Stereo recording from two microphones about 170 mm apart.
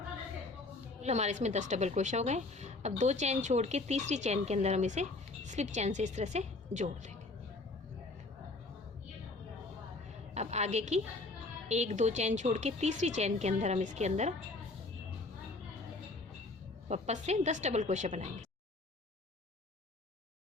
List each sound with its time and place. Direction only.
1.0 s a woman's voice: 40° right (ahead or behind)
10.3 s a sound: 40° right (ahead or behind)
11.7 s a woman's voice: 40° right (ahead or behind)
16.9 s a woman's voice: 40° right (ahead or behind)